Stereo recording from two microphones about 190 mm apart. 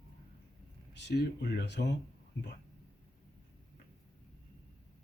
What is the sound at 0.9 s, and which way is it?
Speech, 65° left (ahead or behind).